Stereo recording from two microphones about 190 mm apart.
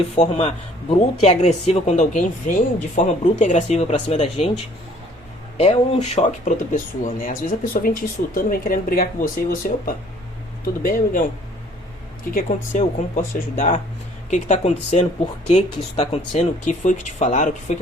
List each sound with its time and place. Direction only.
0.2 s speech: 35° left (ahead or behind)
7.0 s speech: 45° left (ahead or behind)
12.3 s speech: 45° left (ahead or behind)